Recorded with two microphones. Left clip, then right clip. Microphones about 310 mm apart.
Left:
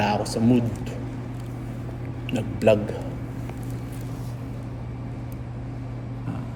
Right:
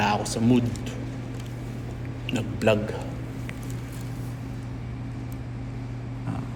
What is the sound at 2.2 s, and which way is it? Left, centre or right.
Speech, right.